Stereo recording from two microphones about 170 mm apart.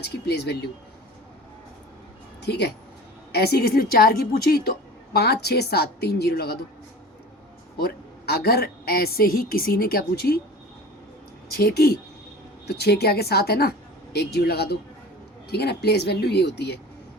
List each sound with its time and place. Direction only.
0.0 s speech: 80° left
2.4 s speech: 85° left
3.3 s a woman's voice: 70° left (ahead or behind)
7.8 s a woman's voice: 70° left (ahead or behind)
11.5 s speech: 65° left (ahead or behind)